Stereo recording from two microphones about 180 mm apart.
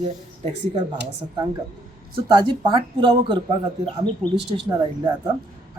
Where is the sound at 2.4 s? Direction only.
25° right (ahead or behind).